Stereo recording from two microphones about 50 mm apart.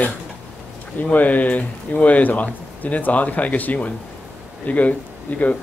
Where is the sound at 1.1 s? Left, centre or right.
Left.